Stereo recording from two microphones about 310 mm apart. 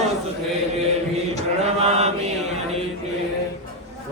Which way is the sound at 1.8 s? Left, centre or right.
Right.